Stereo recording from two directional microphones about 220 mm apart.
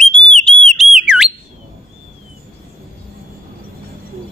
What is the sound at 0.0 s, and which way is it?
Whistle, 5° left (ahead or behind).